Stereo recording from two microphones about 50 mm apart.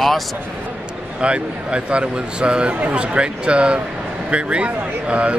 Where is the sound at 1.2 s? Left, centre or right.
Right.